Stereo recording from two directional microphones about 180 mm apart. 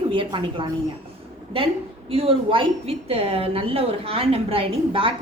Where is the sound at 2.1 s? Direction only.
30° right (ahead or behind).